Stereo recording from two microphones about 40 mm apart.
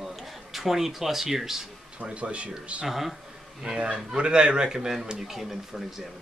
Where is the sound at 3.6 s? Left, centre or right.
Right; by 5.8 s centre.